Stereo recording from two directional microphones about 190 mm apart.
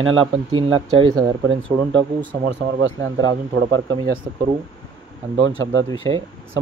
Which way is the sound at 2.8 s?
90° right.